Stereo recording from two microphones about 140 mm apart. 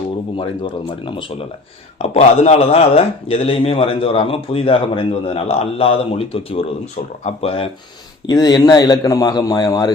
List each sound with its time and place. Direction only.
0.3 s speech: 35° left (ahead or behind)
2.0 s speech: 50° left (ahead or behind)
8.3 s a man's voice: 30° left (ahead or behind)